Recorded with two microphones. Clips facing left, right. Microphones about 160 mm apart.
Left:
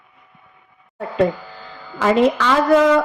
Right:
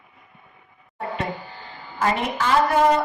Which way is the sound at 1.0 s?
90° left.